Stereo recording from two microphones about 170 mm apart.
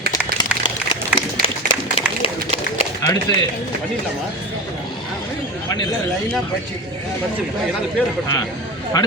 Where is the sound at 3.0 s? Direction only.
20° left (ahead or behind).